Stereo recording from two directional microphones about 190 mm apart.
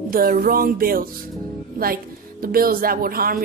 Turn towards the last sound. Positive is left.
turn(degrees=-50)  # may be behind; listen again after turning